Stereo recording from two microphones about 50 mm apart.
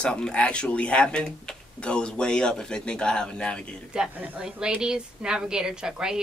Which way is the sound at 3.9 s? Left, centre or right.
Centre.